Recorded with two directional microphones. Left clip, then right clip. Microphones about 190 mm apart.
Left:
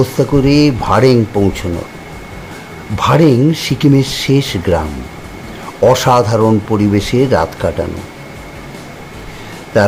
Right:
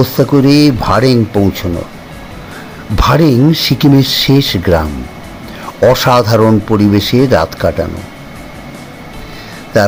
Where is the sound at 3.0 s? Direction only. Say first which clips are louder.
Right 1 dB; 25° right (ahead or behind).